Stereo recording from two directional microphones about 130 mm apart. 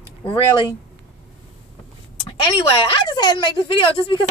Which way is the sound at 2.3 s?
45° left (ahead or behind).